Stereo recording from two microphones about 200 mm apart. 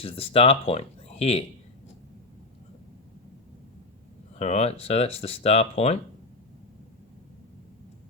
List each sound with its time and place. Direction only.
0.0 s speech: 30° left (ahead or behind)
4.4 s speech: 35° left (ahead or behind)